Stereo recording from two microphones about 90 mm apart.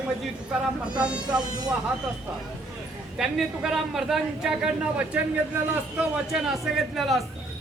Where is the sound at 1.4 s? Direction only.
50° right (ahead or behind).